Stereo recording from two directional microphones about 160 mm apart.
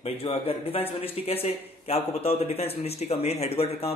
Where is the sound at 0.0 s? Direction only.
35° left (ahead or behind).